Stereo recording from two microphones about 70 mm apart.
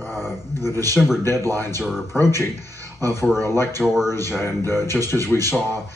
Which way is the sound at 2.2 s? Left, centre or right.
Left.